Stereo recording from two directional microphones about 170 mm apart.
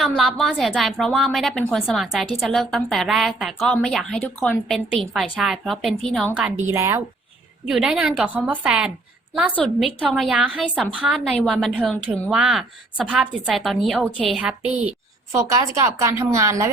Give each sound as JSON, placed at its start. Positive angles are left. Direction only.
{"t": 0.0, "sound": "a woman's voice", "side_deg": 0}
{"t": 7.7, "sound": "a woman's voice", "side_deg": -5}
{"t": 15.3, "sound": "a woman's voice", "side_deg": -15}